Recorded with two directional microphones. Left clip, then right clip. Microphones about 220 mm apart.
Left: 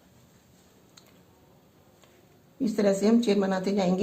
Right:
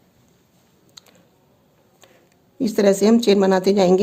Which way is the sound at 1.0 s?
45° right (ahead or behind).